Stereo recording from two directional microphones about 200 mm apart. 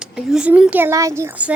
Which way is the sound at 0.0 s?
5° right (ahead or behind).